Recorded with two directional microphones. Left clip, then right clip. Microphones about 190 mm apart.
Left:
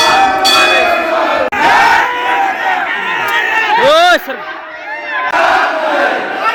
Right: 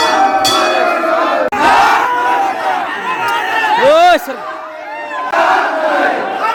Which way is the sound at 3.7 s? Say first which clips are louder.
Even; 10° right (ahead or behind).